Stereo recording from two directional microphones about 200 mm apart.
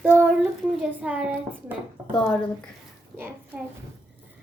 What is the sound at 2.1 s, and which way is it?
Speech, 5° left (ahead or behind).